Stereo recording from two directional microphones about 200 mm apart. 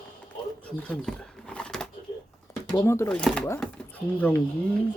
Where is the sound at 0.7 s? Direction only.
5° left (ahead or behind).